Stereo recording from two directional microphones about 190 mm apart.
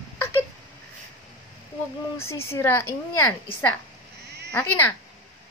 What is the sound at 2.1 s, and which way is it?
A woman's voice, 15° left (ahead or behind).